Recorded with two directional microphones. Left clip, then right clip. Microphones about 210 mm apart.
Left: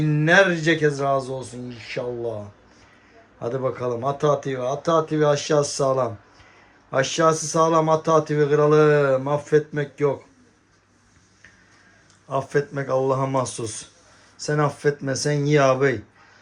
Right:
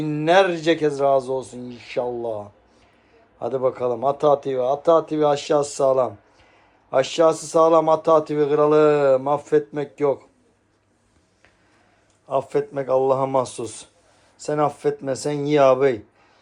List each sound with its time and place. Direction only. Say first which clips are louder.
0.0 s speech: even; 10° right (ahead or behind)
1.8 s speech: right 3 dB; 60° right (ahead or behind)
3.4 s speech: right 3 dB; 10° right (ahead or behind)
12.3 s speech: right 1 dB; 10° right (ahead or behind)